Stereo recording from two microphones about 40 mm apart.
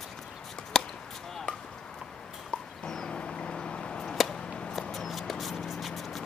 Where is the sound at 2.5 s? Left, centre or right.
Centre.